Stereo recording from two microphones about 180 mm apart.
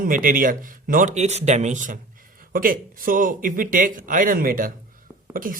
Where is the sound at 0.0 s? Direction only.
50° right (ahead or behind).